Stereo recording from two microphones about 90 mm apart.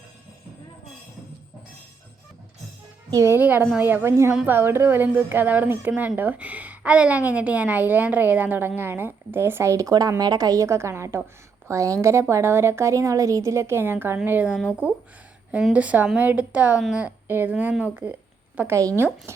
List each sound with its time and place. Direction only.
3.1 s a child's voice: 35° right (ahead or behind)
3.3 s a woman's voice: 25° right (ahead or behind)
14.4 s speech: 5° right (ahead or behind)
15.7 s speech: 15° right (ahead or behind)
17.2 s a woman's voice: 25° right (ahead or behind)
18.7 s speech: 40° right (ahead or behind)
18.9 s a woman's voice: 25° right (ahead or behind)